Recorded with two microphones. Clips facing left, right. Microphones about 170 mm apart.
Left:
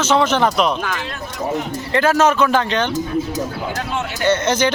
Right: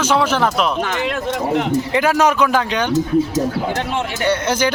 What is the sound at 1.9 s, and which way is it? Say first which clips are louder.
Speech: left 2 dB; 15° right (ahead or behind).